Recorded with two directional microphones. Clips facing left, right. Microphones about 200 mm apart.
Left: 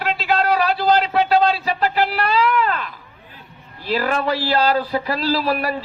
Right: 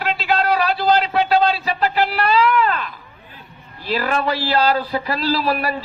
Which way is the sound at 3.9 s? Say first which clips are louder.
Even; 45° left (ahead or behind).